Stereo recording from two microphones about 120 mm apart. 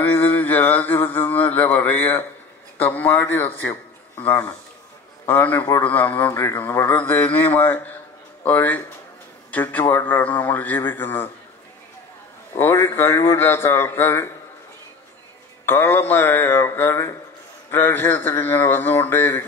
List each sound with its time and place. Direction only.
0.0 s a sound: 15° left (ahead or behind)
2.8 s a man's voice: 15° left (ahead or behind)
12.5 s a man's voice: 20° left (ahead or behind)
15.6 s speech: 20° left (ahead or behind)